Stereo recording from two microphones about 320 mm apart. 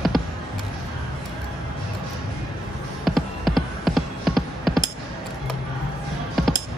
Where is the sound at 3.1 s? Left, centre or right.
Centre.